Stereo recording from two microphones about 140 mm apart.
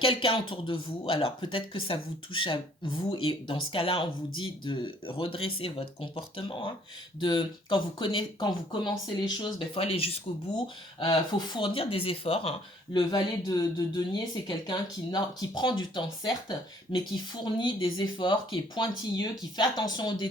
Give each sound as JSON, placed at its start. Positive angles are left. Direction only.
{"t": 0.0, "sound": "speech", "side_deg": 40}
{"t": 11.0, "sound": "speech", "side_deg": 30}